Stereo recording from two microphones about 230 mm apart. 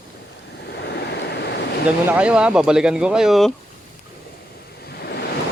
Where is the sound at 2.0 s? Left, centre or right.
Centre.